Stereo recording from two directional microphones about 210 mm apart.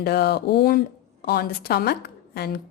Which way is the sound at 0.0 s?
50° left (ahead or behind).